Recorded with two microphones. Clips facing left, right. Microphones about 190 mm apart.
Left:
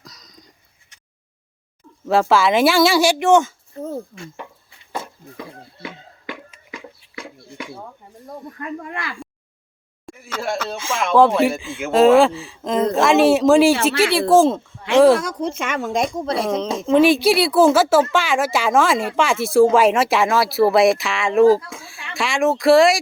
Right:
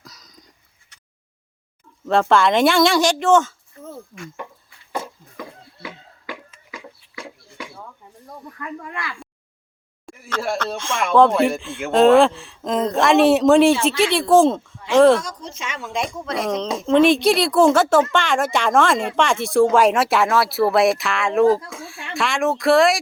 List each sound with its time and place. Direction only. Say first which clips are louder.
0.0 s a sound: left 1 dB; 5° right (ahead or behind)
2.0 s speech: even; 5° left (ahead or behind)
3.8 s speech: left 8 dB; 40° left (ahead or behind)
8.4 s speech: left 2 dB; 35° left (ahead or behind)
10.1 s speech: right 1 dB; 5° left (ahead or behind)
15.2 s speech: left 8 dB; 60° left (ahead or behind); by 16.5 s 35° left (ahead or behind)
16.5 s speech: right 1 dB; 5° left (ahead or behind)